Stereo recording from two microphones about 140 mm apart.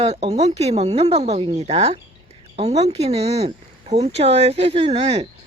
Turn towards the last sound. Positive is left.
turn(degrees=-45)  # may be behind; listen again after turning